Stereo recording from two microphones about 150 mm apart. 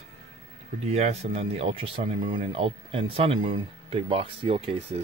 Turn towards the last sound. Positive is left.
turn(degrees=-40)  # may be behind; listen again after turning